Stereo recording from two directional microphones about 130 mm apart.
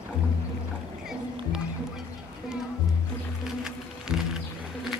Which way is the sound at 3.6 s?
5° right (ahead or behind).